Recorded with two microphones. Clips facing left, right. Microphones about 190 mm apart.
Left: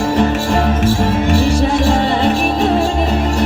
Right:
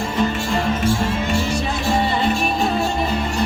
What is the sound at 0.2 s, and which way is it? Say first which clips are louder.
Music: left 3 dB; 75° left (ahead or behind).